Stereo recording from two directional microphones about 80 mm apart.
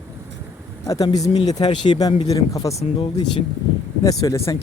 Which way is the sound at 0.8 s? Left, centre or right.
Left.